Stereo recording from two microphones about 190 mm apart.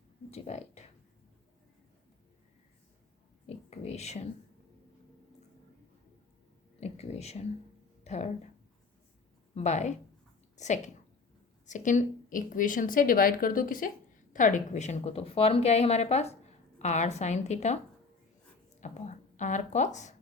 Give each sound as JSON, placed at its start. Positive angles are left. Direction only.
{"t": 0.3, "sound": "speech", "side_deg": 35}
{"t": 3.4, "sound": "a sound", "side_deg": 35}
{"t": 6.7, "sound": "a sound", "side_deg": 35}
{"t": 8.0, "sound": "speech", "side_deg": 35}
{"t": 9.6, "sound": "a woman's voice", "side_deg": 35}
{"t": 18.8, "sound": "speech", "side_deg": 40}